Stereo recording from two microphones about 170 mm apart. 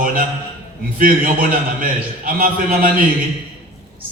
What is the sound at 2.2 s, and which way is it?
Speech, 55° right (ahead or behind).